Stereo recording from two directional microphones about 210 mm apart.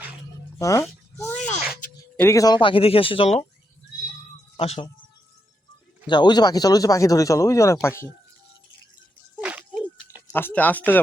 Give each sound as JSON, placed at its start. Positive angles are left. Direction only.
{"t": 0.6, "sound": "a sound", "side_deg": 15}
{"t": 1.8, "sound": "speech", "side_deg": 10}
{"t": 4.5, "sound": "speech", "side_deg": 25}
{"t": 6.1, "sound": "speech", "side_deg": 20}
{"t": 9.4, "sound": "a sound", "side_deg": -5}
{"t": 10.3, "sound": "speech", "side_deg": 10}